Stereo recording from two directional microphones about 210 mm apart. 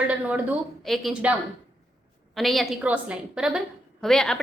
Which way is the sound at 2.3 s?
Centre (ahead or behind).